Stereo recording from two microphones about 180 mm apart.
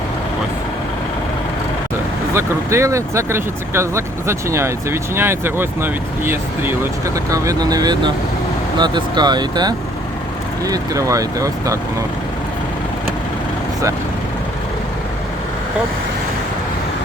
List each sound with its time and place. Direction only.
2.3 s speech: 15° right (ahead or behind)